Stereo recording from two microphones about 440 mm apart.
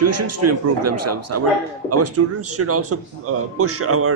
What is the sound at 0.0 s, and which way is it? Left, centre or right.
Speech, right.